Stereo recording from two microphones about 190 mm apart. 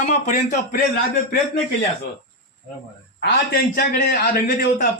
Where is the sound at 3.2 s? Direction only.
50° left (ahead or behind).